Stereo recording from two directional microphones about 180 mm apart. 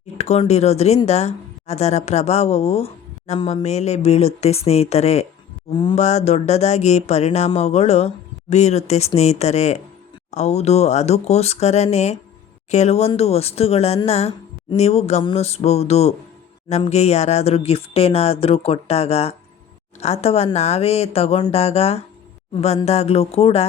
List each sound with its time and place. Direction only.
0.2 s speech: 35° left (ahead or behind)